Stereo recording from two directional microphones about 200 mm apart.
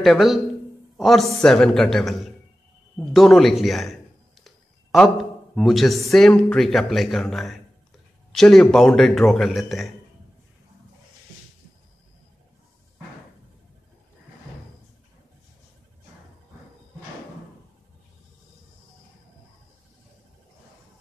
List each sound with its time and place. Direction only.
0.0 s a man's voice: centre (ahead or behind)